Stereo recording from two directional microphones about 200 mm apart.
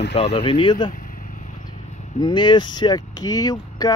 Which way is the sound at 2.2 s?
20° left (ahead or behind).